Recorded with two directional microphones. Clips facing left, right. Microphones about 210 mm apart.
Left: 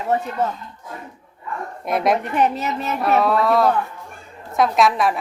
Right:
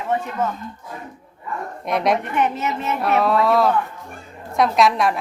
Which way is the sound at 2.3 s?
35° left (ahead or behind).